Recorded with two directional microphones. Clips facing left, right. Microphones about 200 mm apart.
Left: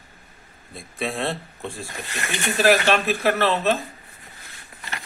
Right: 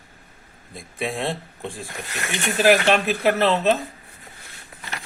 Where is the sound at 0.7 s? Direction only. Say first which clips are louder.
Even; 15° right (ahead or behind).